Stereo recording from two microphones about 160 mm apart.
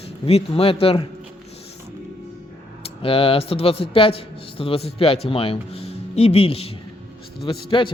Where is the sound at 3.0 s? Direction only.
35° left (ahead or behind).